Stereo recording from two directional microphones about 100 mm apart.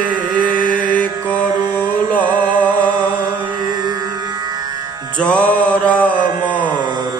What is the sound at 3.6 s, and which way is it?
Music, 45° right (ahead or behind).